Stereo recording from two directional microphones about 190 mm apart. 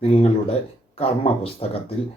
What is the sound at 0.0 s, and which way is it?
Speech, 30° left (ahead or behind).